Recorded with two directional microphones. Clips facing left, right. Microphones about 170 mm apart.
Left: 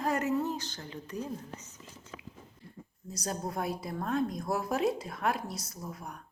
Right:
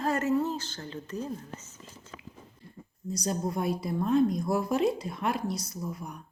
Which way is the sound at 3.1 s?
Centre (ahead or behind).